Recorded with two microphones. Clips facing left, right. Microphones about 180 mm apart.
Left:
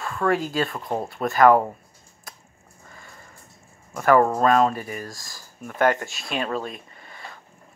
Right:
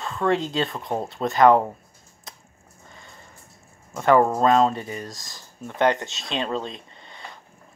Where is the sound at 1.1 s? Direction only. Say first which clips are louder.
Even; 20° right (ahead or behind).